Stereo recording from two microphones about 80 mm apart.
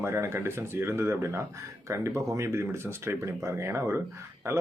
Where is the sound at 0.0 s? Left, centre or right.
Right.